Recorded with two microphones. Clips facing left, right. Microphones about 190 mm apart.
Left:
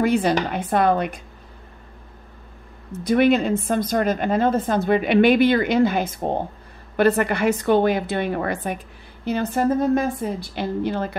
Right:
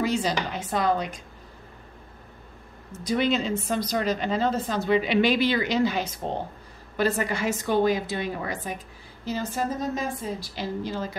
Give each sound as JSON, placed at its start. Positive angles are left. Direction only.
{"t": 0.0, "sound": "a woman's voice", "side_deg": 55}
{"t": 2.9, "sound": "a woman's voice", "side_deg": 60}